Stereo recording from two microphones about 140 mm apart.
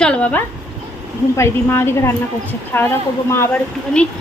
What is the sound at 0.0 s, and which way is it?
A woman's voice, 10° left (ahead or behind).